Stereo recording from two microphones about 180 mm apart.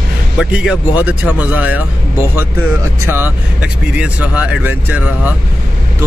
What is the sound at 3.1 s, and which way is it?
Speech, 10° right (ahead or behind).